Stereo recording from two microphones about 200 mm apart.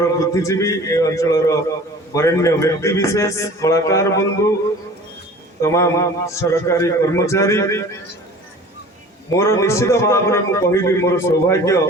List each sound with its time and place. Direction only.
0.0 s a man's voice: 15° left (ahead or behind)
5.6 s a man's voice: 15° left (ahead or behind)
9.3 s a man's voice: 15° left (ahead or behind)